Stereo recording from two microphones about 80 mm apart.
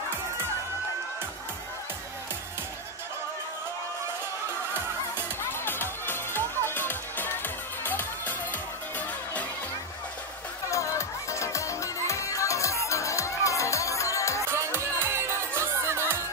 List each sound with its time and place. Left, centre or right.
5.4 s music: left
10.7 s music: left
14.5 s music: right